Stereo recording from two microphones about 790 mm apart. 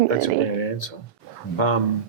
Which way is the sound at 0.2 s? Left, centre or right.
Left.